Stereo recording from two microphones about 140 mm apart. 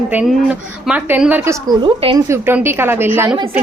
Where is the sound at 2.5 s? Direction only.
15° right (ahead or behind).